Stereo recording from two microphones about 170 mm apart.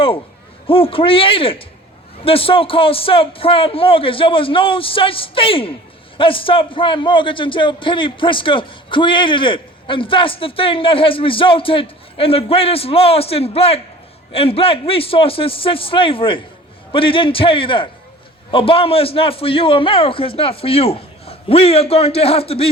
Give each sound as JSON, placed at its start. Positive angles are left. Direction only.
{"t": 0.7, "sound": "a man's voice", "side_deg": 30}